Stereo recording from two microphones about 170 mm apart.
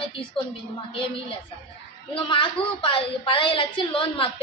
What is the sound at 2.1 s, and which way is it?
A woman's voice, 30° left (ahead or behind).